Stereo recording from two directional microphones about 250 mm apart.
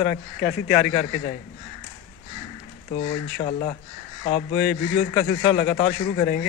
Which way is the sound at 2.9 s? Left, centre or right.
Left.